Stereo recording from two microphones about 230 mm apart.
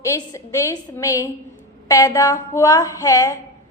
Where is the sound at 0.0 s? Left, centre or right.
Centre.